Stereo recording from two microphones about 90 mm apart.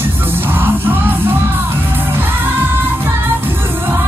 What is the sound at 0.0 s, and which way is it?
Music, 25° right (ahead or behind).